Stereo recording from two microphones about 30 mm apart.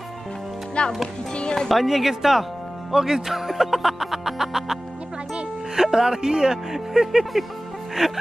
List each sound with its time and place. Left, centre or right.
0.8 s a child's voice: left
1.7 s speech: centre
5.8 s speech: centre